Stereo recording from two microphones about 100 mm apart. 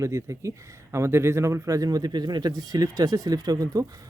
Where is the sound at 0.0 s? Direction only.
30° right (ahead or behind).